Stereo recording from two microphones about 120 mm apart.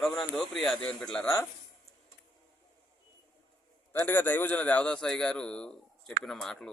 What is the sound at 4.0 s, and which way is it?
A man's voice, 15° left (ahead or behind).